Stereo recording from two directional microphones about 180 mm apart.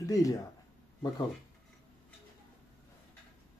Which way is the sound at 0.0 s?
20° left (ahead or behind).